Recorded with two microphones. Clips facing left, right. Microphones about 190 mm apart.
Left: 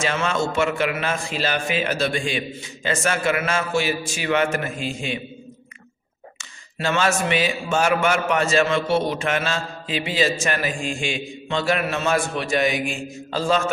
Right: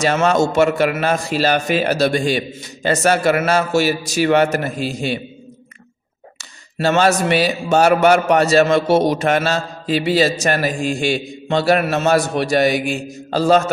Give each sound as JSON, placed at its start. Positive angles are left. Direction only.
{"t": 0.0, "sound": "a man's voice", "side_deg": -40}
{"t": 6.3, "sound": "a man's voice", "side_deg": -35}